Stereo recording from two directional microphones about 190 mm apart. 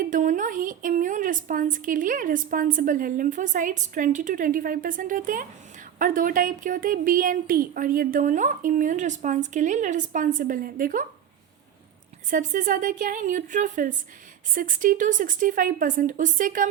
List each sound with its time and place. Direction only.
0.0 s a woman's voice: 45° right (ahead or behind)
12.3 s a woman's voice: 45° right (ahead or behind)